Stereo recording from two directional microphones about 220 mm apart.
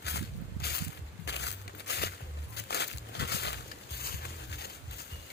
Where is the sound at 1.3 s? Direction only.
50° left (ahead or behind).